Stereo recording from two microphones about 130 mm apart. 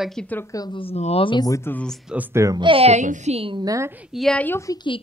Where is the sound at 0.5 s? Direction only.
30° left (ahead or behind).